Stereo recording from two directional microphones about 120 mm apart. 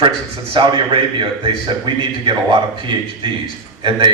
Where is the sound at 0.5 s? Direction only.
45° right (ahead or behind).